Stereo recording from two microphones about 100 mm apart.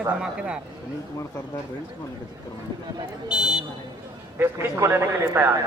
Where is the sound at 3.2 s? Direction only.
10° right (ahead or behind).